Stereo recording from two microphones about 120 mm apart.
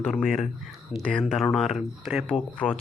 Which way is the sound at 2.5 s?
10° left (ahead or behind).